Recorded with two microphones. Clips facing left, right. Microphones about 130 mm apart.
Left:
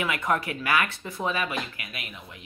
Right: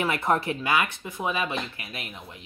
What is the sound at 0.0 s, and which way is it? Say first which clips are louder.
Speech: right 2 dB; 30° right (ahead or behind).